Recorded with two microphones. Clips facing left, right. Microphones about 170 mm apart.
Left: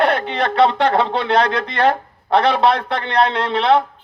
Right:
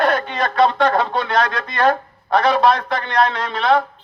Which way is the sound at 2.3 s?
65° left (ahead or behind).